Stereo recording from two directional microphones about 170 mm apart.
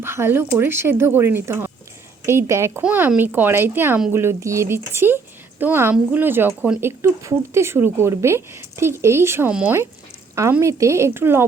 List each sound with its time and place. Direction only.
0.0 s speech: 15° right (ahead or behind)